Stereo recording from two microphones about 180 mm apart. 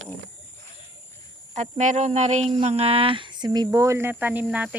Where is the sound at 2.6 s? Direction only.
35° right (ahead or behind); by 4.7 s 10° right (ahead or behind).